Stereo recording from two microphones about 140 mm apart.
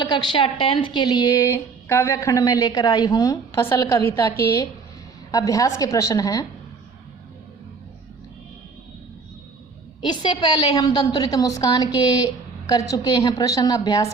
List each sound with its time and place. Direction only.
0.0 s speech: 30° left (ahead or behind)
10.0 s speech: 30° left (ahead or behind)